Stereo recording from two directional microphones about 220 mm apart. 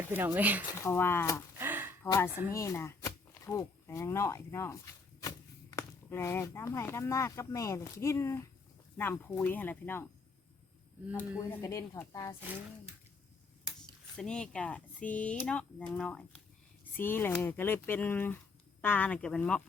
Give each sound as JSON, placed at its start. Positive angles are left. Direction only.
{"t": 0.1, "sound": "speech", "side_deg": -10}
{"t": 0.8, "sound": "speech", "side_deg": 10}
{"t": 1.5, "sound": "gasp", "side_deg": -10}
{"t": 2.0, "sound": "speech", "side_deg": 15}
{"t": 11.2, "sound": "speech", "side_deg": 15}
{"t": 14.2, "sound": "speech", "side_deg": 5}